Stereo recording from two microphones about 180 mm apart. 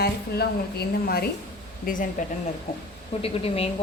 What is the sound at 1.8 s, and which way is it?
Speech, 45° left (ahead or behind).